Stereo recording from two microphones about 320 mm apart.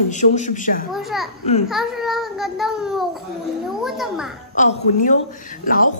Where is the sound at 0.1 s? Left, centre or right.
Left.